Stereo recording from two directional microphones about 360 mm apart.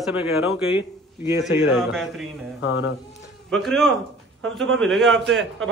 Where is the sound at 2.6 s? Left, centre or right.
Left.